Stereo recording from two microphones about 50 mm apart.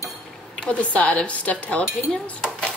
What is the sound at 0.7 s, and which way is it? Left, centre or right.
Speech, left.